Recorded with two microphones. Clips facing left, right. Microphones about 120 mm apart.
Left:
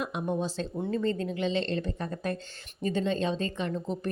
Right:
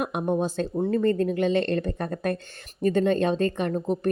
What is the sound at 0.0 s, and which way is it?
A woman's voice, 55° right (ahead or behind).